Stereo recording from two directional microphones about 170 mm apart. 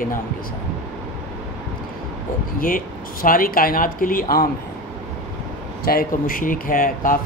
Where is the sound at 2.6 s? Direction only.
55° left (ahead or behind).